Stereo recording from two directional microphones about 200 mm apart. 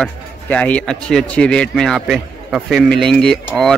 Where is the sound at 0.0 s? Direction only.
5° left (ahead or behind).